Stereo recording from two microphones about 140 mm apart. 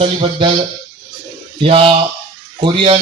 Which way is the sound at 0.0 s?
40° right (ahead or behind).